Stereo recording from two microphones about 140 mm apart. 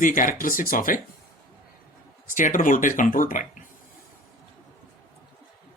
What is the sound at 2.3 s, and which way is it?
Speech, 70° left (ahead or behind).